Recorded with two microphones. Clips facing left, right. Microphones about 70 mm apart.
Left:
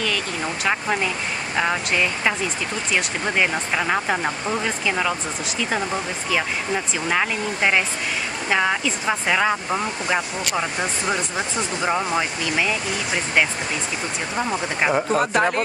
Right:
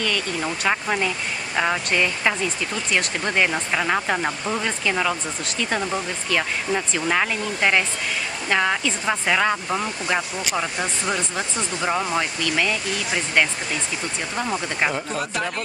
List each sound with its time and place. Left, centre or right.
0.0 s speech: centre
15.0 s speech: left